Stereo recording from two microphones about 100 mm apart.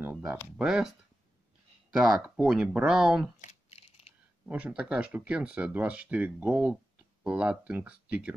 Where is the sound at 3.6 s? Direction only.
90° left.